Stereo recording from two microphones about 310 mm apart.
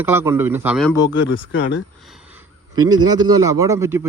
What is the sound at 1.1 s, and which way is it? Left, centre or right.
Speech, left.